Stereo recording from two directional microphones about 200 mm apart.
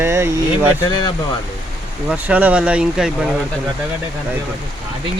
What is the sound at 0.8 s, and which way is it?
Speech, 20° left (ahead or behind).